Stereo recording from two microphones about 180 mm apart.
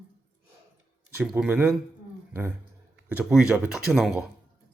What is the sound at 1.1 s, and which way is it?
Speech, 5° right (ahead or behind).